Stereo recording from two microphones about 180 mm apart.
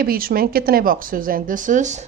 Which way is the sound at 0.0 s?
55° right (ahead or behind).